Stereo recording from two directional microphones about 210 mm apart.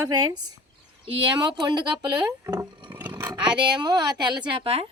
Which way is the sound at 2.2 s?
10° right (ahead or behind).